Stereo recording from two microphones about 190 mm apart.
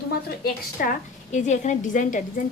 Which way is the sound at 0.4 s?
45° left (ahead or behind).